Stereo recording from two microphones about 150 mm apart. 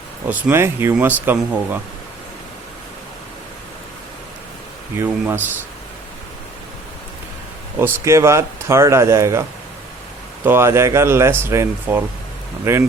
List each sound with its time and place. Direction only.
0.3 s speech: 15° right (ahead or behind)
4.9 s speech: 15° right (ahead or behind)
7.8 s speech: 15° right (ahead or behind)
10.4 s speech: 15° right (ahead or behind)